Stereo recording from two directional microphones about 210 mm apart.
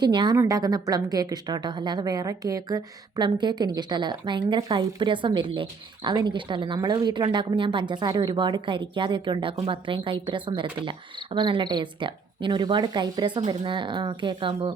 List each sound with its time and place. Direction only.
0.0 s a woman's voice: 20° right (ahead or behind)